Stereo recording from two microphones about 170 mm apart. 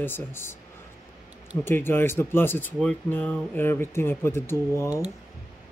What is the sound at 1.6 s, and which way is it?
Speech, 15° left (ahead or behind).